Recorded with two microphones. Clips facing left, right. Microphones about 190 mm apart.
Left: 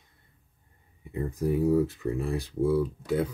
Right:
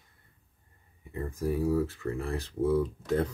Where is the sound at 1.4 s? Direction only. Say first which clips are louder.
Left 4 dB; 20° left (ahead or behind).